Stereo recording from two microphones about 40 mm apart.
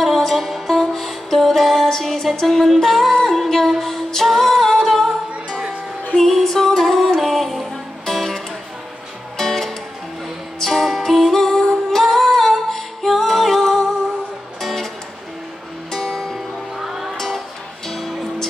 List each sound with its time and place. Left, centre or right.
0.0 s music: centre
9.4 s music: centre
15.9 s music: centre
16.7 s music: centre
17.8 s music: centre